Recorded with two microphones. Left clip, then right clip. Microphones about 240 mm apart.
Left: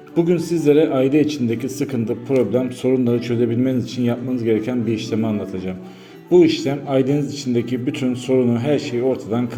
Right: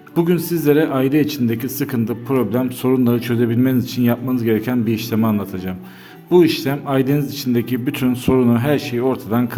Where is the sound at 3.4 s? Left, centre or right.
Right.